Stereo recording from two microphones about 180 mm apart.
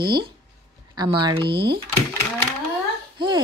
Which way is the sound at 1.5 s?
65° right (ahead or behind).